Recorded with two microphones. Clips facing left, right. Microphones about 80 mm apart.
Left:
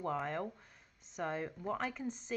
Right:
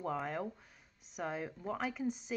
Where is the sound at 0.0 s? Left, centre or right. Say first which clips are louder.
Even; centre.